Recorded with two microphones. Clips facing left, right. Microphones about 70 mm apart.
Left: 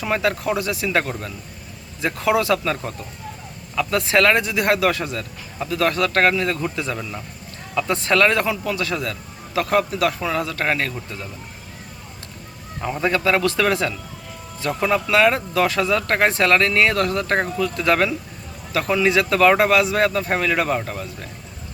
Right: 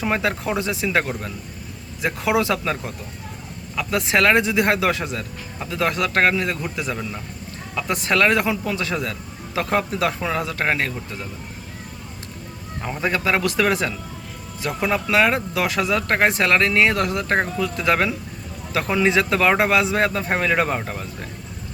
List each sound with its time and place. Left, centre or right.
0.0 s speech: right
13.0 s speech: centre